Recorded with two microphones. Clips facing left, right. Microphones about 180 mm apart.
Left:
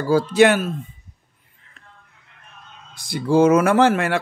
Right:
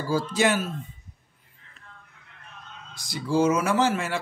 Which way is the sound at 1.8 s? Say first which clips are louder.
Left 2 dB; 60° left (ahead or behind).